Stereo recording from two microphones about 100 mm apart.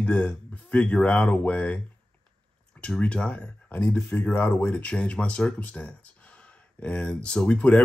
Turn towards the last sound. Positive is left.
turn(degrees=15)  # may be behind; listen again after turning